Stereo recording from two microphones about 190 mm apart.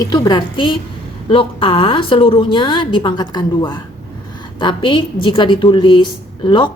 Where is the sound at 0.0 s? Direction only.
20° left (ahead or behind).